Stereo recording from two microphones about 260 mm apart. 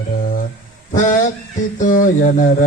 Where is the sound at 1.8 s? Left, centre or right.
Left.